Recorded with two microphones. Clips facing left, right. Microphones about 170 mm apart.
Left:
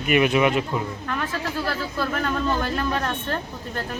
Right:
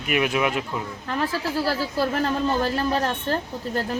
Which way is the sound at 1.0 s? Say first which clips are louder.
Right 2 dB; 30° right (ahead or behind).